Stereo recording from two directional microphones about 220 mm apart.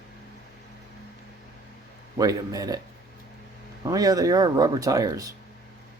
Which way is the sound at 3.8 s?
15° right (ahead or behind).